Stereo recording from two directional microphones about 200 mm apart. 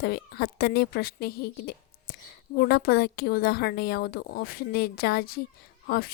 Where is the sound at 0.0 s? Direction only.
55° left (ahead or behind).